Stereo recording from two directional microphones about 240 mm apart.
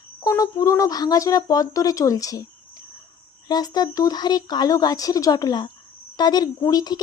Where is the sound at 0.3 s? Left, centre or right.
Centre.